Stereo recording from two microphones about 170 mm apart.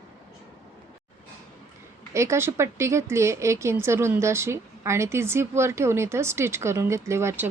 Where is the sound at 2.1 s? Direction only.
15° right (ahead or behind).